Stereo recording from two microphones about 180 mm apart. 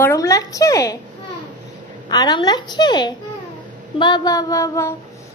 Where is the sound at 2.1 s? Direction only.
25° left (ahead or behind).